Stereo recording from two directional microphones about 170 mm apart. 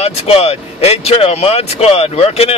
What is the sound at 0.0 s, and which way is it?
Speech, 35° left (ahead or behind).